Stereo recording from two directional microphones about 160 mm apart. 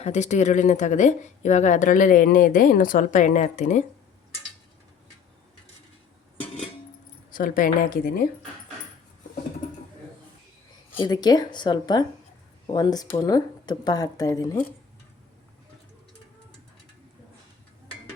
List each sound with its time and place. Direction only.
0.0 s speech: 45° left (ahead or behind)
7.3 s a woman's voice: 60° left (ahead or behind)
10.9 s speech: 25° left (ahead or behind)